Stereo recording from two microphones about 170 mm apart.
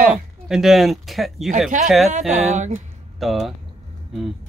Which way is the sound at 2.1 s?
45° right (ahead or behind).